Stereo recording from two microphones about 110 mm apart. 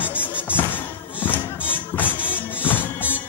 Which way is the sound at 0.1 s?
10° right (ahead or behind).